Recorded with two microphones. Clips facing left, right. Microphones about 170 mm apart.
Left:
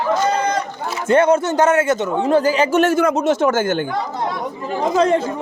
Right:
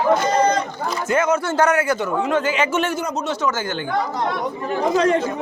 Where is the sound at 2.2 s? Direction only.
35° left (ahead or behind).